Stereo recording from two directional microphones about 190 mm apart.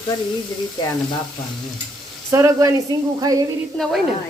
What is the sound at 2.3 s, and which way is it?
Speech, 15° right (ahead or behind).